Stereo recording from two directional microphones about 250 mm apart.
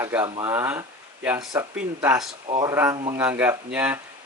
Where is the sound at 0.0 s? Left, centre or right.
Centre.